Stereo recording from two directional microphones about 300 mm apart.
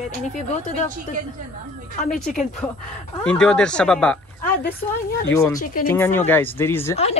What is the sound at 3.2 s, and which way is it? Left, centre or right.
Speech, centre.